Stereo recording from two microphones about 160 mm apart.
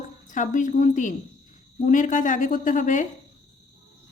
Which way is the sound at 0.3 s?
50° left (ahead or behind).